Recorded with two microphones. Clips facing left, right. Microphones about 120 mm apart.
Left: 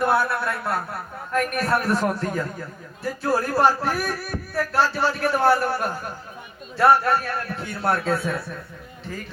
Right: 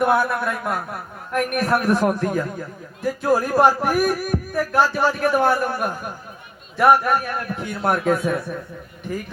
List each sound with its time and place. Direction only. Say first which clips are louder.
0.0 s speech: right 2 dB; 15° right (ahead or behind)